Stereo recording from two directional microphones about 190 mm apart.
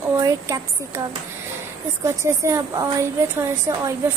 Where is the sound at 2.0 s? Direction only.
15° right (ahead or behind).